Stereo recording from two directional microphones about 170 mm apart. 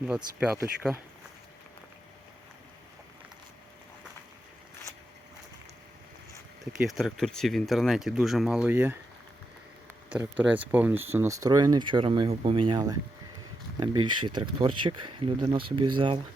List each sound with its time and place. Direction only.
0.5 s speech: 15° right (ahead or behind)
6.8 s speech: centre (ahead or behind)
10.1 s speech: 5° right (ahead or behind); by 16.2 s 30° right (ahead or behind)